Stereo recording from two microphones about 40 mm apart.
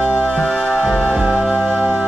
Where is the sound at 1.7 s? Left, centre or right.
Right.